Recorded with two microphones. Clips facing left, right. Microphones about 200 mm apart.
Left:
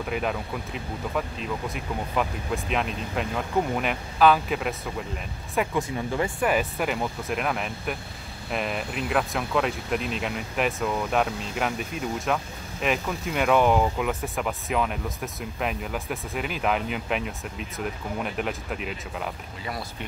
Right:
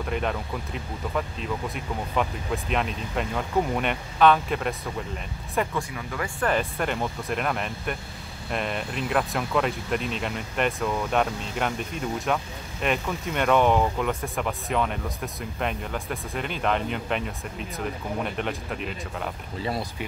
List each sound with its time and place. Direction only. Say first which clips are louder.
0.1 s speech: even; 5° left (ahead or behind)
5.8 s speech: left 4 dB; 25° left (ahead or behind)
6.4 s speech: right 2 dB; 5° left (ahead or behind)